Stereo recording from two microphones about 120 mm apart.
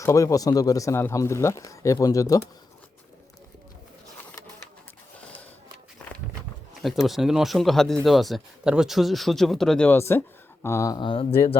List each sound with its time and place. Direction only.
0.0 s speech: 25° left (ahead or behind)
6.8 s speech: centre (ahead or behind); by 10.9 s 25° left (ahead or behind)
10.9 s speech: 45° left (ahead or behind)